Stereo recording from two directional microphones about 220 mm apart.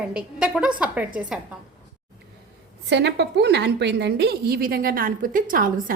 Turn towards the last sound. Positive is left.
turn(degrees=-40)  # may be behind; listen again after turning